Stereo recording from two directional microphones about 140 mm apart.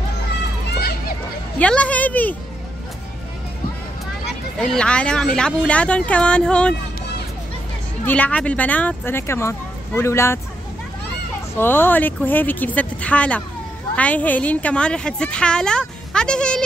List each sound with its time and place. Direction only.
0.7 s a sound: 90° left
1.6 s speech: 10° left (ahead or behind)
4.6 s speech: 5° left (ahead or behind)
8.0 s speech: 10° left (ahead or behind)
11.5 s speech: 15° left (ahead or behind)